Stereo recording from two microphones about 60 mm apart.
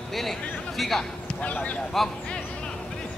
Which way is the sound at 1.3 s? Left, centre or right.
Left.